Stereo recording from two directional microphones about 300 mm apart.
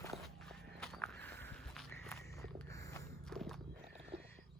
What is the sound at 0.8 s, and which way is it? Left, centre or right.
Walk, centre.